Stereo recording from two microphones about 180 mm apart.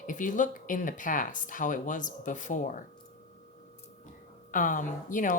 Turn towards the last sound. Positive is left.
turn(degrees=45)  # may be behind; listen again after turning